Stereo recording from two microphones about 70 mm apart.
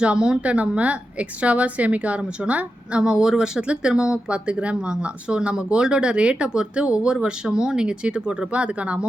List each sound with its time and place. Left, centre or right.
0.0 s speech: centre